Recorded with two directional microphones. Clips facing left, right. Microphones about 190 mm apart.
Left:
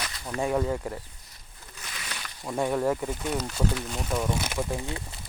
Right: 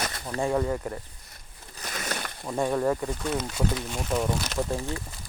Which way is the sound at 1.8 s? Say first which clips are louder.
Right 8 dB; 45° right (ahead or behind).